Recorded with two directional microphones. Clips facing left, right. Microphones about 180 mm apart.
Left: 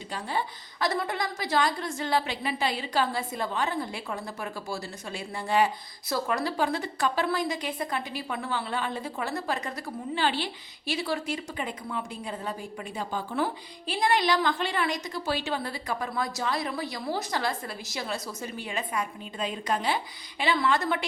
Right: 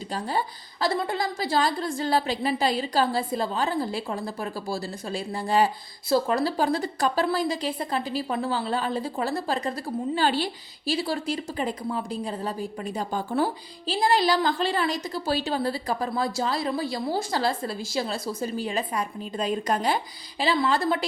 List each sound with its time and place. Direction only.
0.1 s a woman's voice: 35° right (ahead or behind)
20.4 s a woman's voice: 35° right (ahead or behind)